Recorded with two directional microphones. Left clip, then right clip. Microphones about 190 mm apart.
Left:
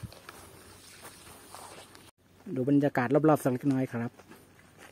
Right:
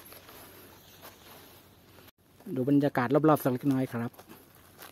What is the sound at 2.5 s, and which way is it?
Speech, centre (ahead or behind).